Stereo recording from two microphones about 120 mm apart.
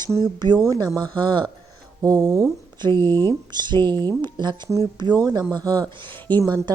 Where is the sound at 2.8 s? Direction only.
40° right (ahead or behind).